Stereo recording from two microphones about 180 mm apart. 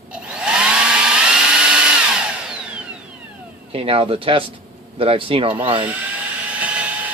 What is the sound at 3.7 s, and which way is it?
Speech, 30° right (ahead or behind).